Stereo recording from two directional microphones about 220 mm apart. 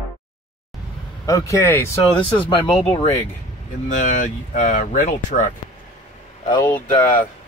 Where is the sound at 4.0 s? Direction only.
35° left (ahead or behind).